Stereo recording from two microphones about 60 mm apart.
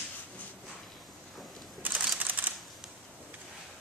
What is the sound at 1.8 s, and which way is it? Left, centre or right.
Typewriter, right.